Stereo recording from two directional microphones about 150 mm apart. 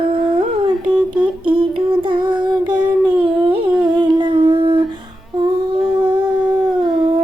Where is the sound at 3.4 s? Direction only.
35° right (ahead or behind).